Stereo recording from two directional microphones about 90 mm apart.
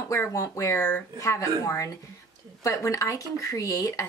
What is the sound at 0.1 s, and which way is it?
Speech, 35° left (ahead or behind).